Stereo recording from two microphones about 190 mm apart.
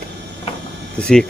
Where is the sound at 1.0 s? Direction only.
5° left (ahead or behind).